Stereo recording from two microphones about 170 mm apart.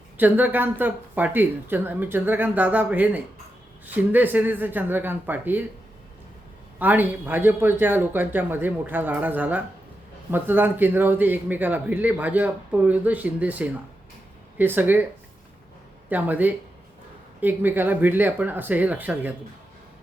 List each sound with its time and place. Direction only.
0.2 s speech: 10° right (ahead or behind)
6.7 s speech: 10° right (ahead or behind)
16.0 s speech: 10° right (ahead or behind)